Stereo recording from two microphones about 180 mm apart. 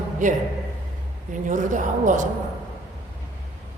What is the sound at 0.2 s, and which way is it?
A man's voice, 45° right (ahead or behind).